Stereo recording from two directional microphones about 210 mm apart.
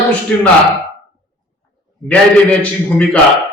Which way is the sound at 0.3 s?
5° left (ahead or behind).